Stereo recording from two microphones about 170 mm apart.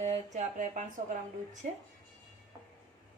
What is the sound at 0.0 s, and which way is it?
Speech, 45° right (ahead or behind).